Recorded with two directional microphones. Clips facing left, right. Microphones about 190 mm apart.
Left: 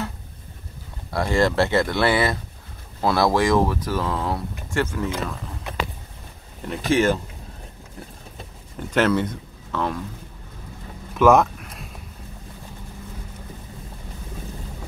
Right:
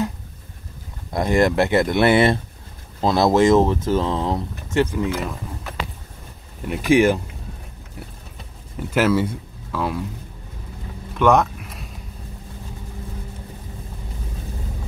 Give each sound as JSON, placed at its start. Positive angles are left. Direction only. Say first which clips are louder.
{"t": 1.1, "sound": "speech", "louder": "right 2 dB", "side_deg": -20}
{"t": 6.7, "sound": "speech", "louder": "right 4 dB", "side_deg": -15}
{"t": 8.7, "sound": "speech", "louder": "right 1 dB", "side_deg": -5}
{"t": 11.1, "sound": "a sound", "louder": "left 1 dB", "side_deg": 0}